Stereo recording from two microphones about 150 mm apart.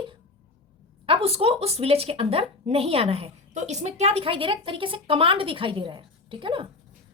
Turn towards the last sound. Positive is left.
turn(degrees=-35)  # may be behind; listen again after turning